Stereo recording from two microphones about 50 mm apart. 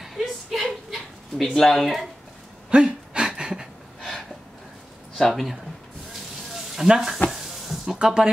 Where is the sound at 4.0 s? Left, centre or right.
Centre.